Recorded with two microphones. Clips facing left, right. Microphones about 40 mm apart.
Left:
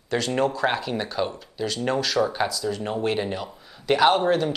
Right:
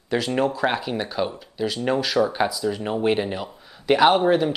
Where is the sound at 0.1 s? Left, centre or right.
Centre.